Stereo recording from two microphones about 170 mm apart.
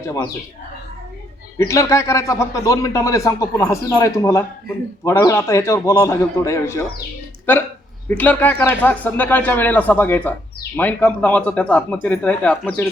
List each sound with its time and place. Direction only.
0.0 s speech: 20° left (ahead or behind)
1.5 s speech: 20° left (ahead or behind)
8.0 s speech: 10° left (ahead or behind)